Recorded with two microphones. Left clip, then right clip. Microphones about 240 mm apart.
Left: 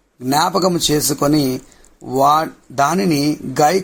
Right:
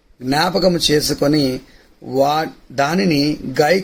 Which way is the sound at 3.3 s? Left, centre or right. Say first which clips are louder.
Left 2 dB; left.